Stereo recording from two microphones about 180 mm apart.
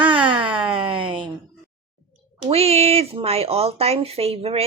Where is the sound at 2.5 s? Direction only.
35° right (ahead or behind).